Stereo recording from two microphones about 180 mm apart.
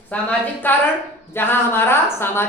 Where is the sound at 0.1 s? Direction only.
10° left (ahead or behind).